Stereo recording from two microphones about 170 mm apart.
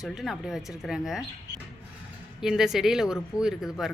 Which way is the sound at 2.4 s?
5° right (ahead or behind).